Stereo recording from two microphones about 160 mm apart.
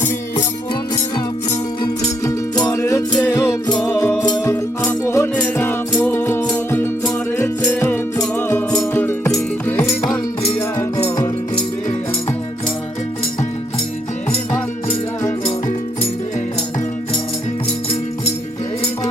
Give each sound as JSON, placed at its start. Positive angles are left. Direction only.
{"t": 1.8, "sound": "music", "side_deg": 25}
{"t": 4.5, "sound": "music", "side_deg": 10}